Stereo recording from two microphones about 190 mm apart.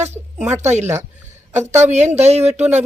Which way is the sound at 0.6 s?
35° right (ahead or behind).